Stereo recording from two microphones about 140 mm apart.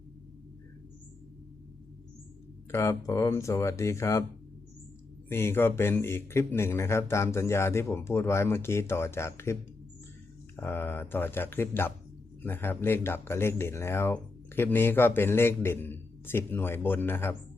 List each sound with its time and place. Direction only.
2.7 s speech: 20° left (ahead or behind)
5.3 s speech: 15° left (ahead or behind)
10.6 s speech: 15° left (ahead or behind)